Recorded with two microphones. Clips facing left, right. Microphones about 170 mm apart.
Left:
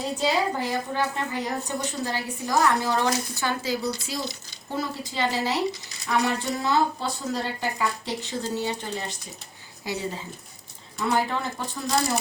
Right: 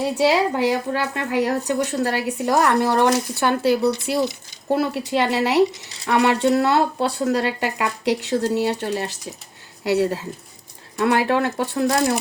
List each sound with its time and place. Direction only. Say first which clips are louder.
0.2 s a woman's voice: right 7 dB; 75° right (ahead or behind)